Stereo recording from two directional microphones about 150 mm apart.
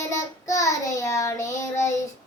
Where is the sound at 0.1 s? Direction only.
20° left (ahead or behind).